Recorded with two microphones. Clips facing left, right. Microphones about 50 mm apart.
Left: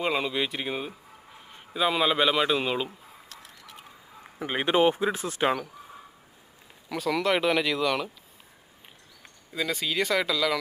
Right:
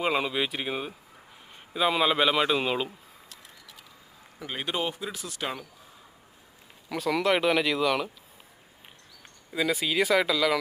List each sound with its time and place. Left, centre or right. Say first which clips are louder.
0.0 s a man's voice: even; centre
4.4 s speech: left 8 dB; left
6.8 s a man's voice: even; centre
9.5 s a man's voice: right 2 dB; centre